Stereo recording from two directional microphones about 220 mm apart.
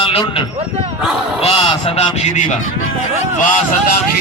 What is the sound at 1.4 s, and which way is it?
A man's voice, 25° left (ahead or behind).